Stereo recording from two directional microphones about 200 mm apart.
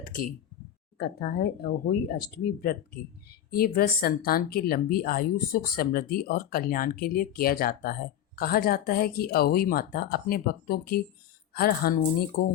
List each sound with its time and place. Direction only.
0.0 s a woman's voice: 45° left (ahead or behind)